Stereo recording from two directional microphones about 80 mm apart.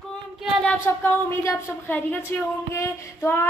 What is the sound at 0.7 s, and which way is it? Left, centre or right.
Speech, left.